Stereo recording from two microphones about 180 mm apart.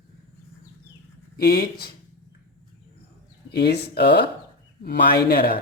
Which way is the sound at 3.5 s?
65° left (ahead or behind).